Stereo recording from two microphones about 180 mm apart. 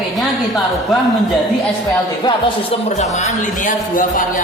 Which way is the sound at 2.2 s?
25° left (ahead or behind).